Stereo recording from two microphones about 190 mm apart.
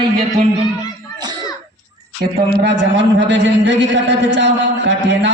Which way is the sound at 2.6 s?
70° right (ahead or behind).